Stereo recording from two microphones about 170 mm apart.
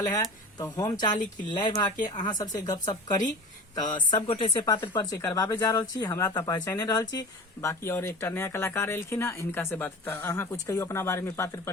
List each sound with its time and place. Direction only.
0.0 s a woman's voice: 20° left (ahead or behind)